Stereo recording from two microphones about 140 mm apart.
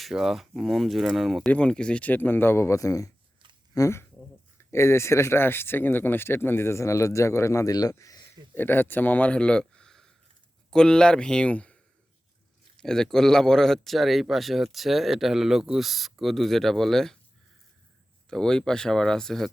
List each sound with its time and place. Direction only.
0.0 s speech: centre (ahead or behind)
18.3 s speech: 5° left (ahead or behind)